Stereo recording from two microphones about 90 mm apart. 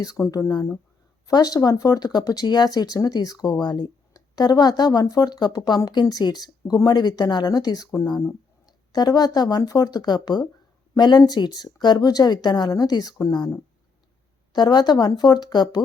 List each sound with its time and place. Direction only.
0.0 s speech: 40° left (ahead or behind)